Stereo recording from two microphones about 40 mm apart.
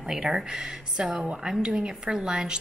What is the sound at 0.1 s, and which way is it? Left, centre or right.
A woman's voice, centre.